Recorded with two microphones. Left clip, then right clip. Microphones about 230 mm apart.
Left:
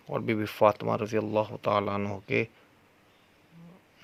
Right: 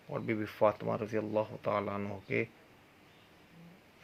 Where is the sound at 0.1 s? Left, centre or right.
Left.